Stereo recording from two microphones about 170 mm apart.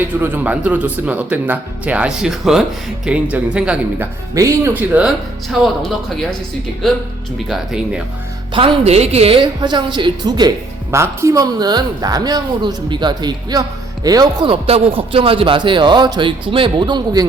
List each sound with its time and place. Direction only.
0.2 s speech: 10° right (ahead or behind)
7.3 s speech: 5° right (ahead or behind)
8.5 s speech: 30° right (ahead or behind)